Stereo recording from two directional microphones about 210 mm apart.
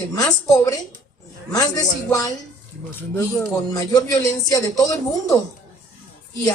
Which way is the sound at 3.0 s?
10° left (ahead or behind).